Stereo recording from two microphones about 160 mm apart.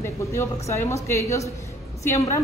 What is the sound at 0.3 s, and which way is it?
A woman's voice, 15° left (ahead or behind).